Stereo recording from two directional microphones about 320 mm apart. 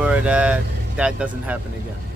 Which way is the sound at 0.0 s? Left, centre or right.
Centre.